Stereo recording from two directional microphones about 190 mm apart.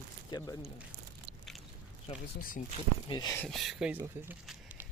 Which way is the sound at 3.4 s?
Centre (ahead or behind).